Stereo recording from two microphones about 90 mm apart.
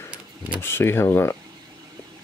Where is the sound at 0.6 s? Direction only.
25° left (ahead or behind).